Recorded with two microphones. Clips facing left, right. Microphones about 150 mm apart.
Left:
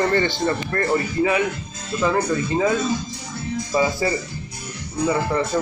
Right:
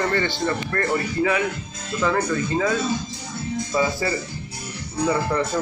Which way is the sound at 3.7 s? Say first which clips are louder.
Left 2 dB; 15° left (ahead or behind).